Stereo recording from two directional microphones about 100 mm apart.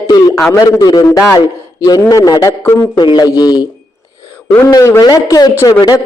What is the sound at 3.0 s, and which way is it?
Speech, 50° left (ahead or behind).